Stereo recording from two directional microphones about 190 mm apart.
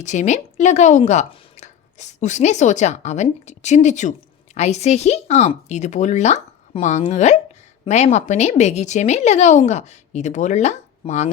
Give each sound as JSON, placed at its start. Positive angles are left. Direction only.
{"t": 0.0, "sound": "speech", "side_deg": 40}